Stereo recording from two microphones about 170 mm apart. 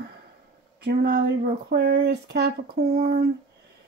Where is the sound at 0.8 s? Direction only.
60° right (ahead or behind).